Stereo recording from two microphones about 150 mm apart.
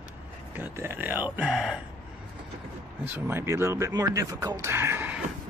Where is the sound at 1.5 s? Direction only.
Centre (ahead or behind).